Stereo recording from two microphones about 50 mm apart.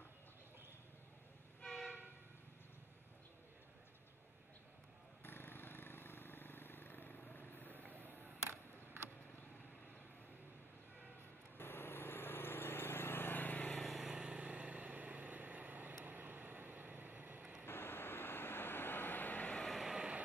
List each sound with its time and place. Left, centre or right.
1.6 s train: centre
5.2 s vehicle: left
8.5 s a sound: right
11.5 s vehicle: left
13.9 s vehicle: centre
14.3 s vehicle: right
17.4 s vehicle: right
17.6 s vehicle: left
19.8 s vehicle: centre